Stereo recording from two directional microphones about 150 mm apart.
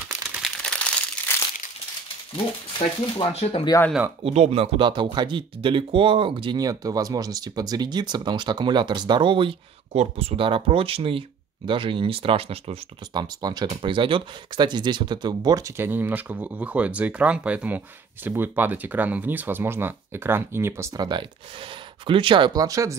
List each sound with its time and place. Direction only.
0.4 s crumpling: 5° left (ahead or behind)
3.2 s speech: 40° left (ahead or behind)
4.2 s speech: 45° right (ahead or behind); by 22.9 s 20° right (ahead or behind)